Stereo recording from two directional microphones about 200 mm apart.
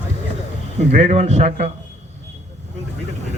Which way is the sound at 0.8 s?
35° right (ahead or behind).